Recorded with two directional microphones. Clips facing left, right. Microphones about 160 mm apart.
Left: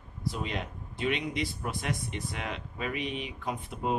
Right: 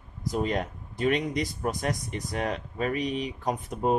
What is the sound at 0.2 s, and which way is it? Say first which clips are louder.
A man's voice: right 7 dB; 45° right (ahead or behind).